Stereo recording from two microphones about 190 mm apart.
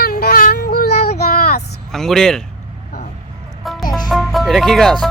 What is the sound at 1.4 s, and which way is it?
Vehicle, 55° left (ahead or behind).